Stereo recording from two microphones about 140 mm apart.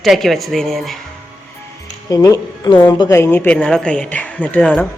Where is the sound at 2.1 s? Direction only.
25° left (ahead or behind).